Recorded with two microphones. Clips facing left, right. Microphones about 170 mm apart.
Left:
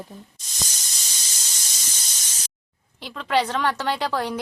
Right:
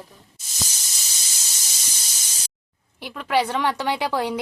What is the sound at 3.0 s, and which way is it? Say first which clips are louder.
A woman's voice: right 1 dB; 10° right (ahead or behind).